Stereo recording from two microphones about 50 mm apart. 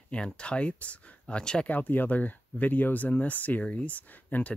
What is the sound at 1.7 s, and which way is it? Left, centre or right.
Speech, left.